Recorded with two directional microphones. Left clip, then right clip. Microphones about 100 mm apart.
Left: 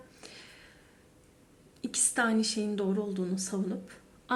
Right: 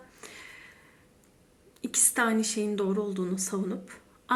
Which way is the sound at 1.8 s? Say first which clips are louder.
Right 2 dB; 35° left (ahead or behind).